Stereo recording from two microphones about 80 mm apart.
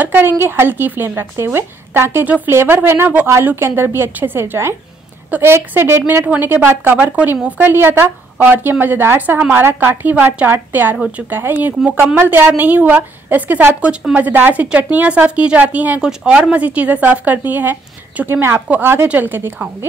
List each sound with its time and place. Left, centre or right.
0.0 s a woman's voice: right
6.2 s a woman's voice: right